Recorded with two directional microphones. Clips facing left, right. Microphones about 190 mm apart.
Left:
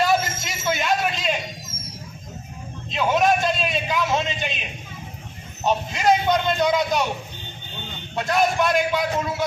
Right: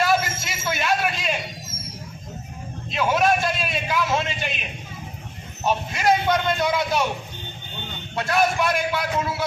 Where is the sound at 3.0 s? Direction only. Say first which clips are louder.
Left 1 dB; 20° left (ahead or behind).